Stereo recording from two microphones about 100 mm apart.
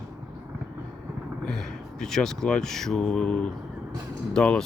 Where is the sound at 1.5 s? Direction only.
5° left (ahead or behind).